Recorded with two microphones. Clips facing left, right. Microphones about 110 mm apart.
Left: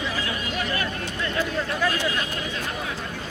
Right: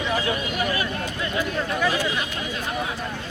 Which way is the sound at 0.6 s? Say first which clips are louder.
Right 2 dB; 10° right (ahead or behind).